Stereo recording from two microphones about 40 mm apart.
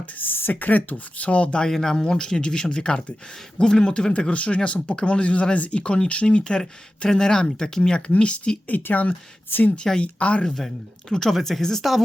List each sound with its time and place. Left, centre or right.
0.2 s speech: left
0.5 s speech: left
1.6 s speech: centre; by 6.4 s left
7.0 s speech: centre
8.8 s speech: left
9.5 s speech: left
9.7 s speech: centre
10.0 s speech: left
10.4 s speech: centre
11.8 s speech: centre